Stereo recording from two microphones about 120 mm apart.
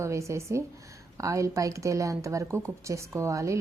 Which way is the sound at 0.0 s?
25° right (ahead or behind).